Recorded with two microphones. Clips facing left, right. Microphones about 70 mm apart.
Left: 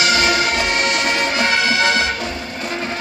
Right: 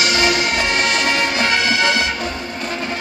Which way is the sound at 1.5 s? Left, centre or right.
Left.